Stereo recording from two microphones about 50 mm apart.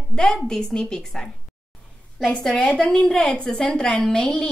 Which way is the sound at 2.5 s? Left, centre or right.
Left.